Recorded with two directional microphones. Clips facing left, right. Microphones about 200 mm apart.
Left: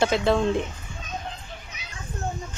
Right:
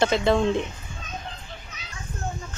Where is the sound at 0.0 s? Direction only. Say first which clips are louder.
Right 1 dB; centre (ahead or behind).